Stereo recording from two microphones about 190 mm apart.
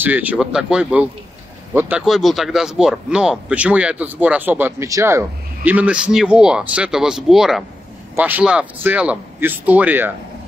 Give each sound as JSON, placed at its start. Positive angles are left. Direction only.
{"t": 0.0, "sound": "a man's voice", "side_deg": -10}